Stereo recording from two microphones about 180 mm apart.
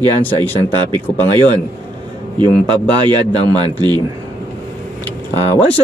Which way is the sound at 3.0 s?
25° right (ahead or behind).